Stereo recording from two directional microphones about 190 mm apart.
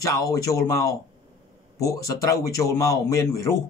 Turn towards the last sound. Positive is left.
turn(degrees=15)  # may be behind; listen again after turning